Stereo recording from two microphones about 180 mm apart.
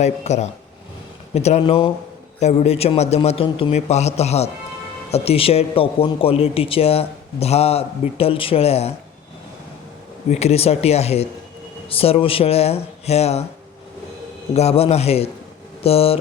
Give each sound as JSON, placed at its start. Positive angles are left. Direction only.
{"t": 0.0, "sound": "a man's voice", "side_deg": 40}
{"t": 10.2, "sound": "a man's voice", "side_deg": 35}
{"t": 14.5, "sound": "a man's voice", "side_deg": 35}